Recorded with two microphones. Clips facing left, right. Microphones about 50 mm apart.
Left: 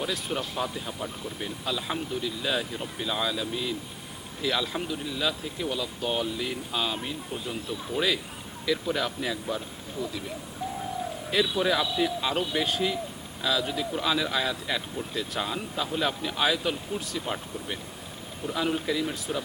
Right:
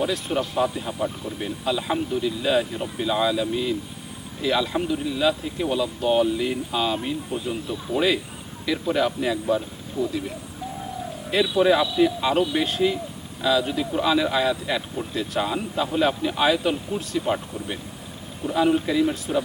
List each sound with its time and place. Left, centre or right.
0.0 s speech: centre
11.5 s speech: centre